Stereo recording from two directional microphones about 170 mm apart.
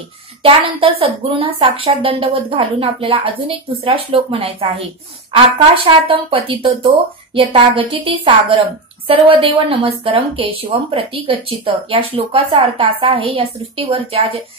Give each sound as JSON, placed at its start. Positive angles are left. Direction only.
{"t": 0.4, "sound": "speech", "side_deg": -30}